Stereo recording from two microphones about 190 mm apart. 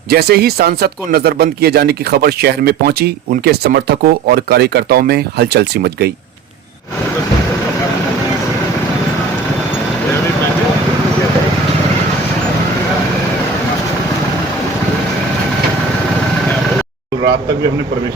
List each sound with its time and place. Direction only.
0.1 s speech: 55° right (ahead or behind)